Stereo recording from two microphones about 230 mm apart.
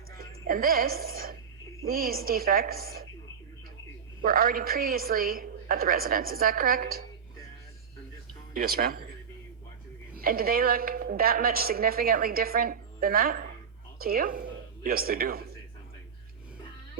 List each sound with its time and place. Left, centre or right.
0.2 s a woman's voice: right
4.2 s speech: right
8.5 s speech: right
10.2 s speech: right